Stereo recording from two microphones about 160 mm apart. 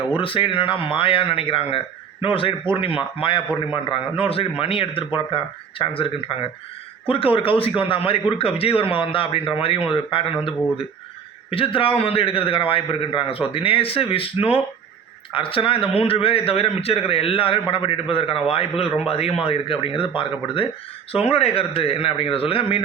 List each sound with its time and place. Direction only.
0.2 s speech: 35° left (ahead or behind)
11.5 s speech: 35° left (ahead or behind)